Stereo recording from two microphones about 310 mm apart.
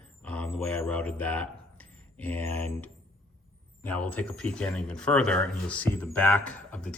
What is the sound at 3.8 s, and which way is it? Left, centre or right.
Speech, centre.